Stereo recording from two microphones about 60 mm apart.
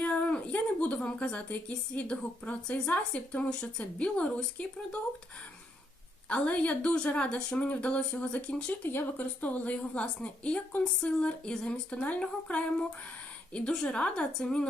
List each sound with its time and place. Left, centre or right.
0.0 s speech: left
6.2 s speech: left
8.9 s speech: left
9.4 s a woman's voice: left